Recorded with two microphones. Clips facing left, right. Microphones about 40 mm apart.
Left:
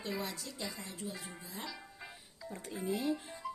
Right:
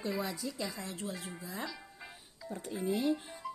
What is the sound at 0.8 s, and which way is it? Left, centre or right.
Speech, right.